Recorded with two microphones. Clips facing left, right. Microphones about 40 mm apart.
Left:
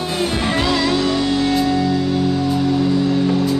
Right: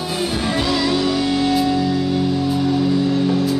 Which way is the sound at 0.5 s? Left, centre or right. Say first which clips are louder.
Left 1 dB; left.